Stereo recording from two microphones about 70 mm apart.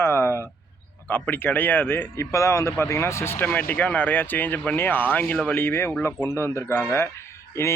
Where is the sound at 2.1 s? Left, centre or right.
Left.